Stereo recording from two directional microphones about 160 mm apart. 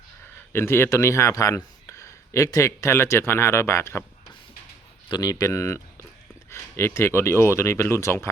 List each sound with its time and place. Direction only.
0.5 s speech: 15° left (ahead or behind)
5.1 s speech: 20° left (ahead or behind)